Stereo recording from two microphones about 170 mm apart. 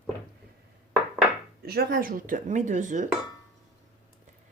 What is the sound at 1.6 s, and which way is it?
Speech, 65° right (ahead or behind).